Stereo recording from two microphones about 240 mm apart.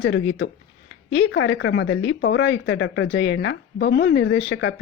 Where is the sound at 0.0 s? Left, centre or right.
Left.